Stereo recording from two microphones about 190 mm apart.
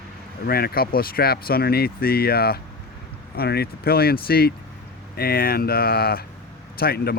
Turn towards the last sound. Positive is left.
turn(degrees=55)  # may be behind; listen again after turning